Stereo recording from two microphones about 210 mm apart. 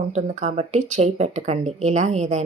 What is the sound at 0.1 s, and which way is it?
Speech, 30° right (ahead or behind).